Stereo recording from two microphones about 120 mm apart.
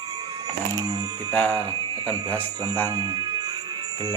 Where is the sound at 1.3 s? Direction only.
15° left (ahead or behind).